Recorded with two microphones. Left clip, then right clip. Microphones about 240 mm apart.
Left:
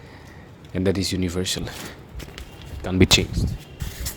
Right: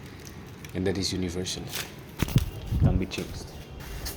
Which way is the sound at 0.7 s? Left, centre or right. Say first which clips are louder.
Left 5 dB; left.